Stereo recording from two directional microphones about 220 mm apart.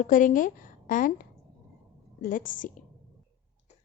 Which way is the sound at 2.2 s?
40° left (ahead or behind).